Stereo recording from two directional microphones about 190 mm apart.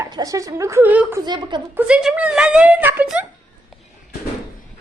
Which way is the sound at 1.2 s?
25° right (ahead or behind).